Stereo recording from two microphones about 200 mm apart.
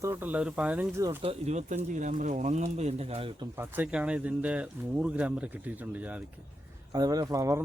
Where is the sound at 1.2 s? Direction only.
35° right (ahead or behind).